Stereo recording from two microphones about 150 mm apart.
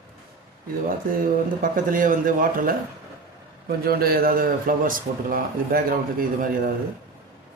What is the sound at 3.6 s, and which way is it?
A man's voice, 90° right.